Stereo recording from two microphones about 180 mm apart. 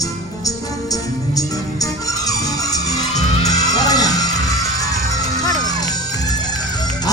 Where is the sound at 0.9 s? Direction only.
20° left (ahead or behind).